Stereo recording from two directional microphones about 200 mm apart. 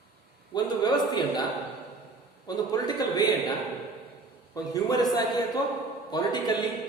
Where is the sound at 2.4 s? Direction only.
20° left (ahead or behind).